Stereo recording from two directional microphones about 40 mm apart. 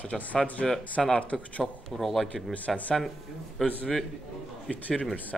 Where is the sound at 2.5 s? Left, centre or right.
Left.